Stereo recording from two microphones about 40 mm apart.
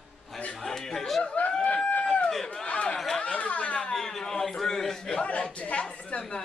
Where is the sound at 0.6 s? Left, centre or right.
Centre.